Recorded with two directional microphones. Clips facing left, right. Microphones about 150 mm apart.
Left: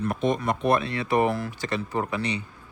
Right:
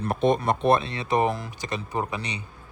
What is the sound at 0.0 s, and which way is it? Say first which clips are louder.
A man's voice: right 2 dB; 35° right (ahead or behind).